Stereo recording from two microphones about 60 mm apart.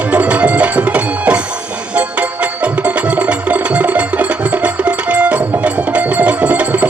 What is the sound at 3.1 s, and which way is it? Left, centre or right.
Music, right.